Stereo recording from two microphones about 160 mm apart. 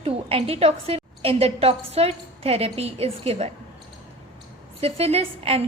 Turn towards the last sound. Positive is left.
turn(degrees=-40)  # may be behind; listen again after turning